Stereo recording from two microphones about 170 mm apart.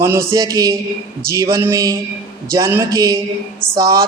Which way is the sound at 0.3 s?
20° right (ahead or behind).